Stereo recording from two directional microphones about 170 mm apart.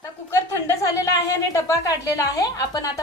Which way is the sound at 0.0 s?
15° left (ahead or behind).